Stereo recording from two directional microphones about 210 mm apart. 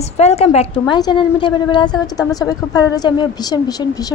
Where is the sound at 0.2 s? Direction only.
30° left (ahead or behind).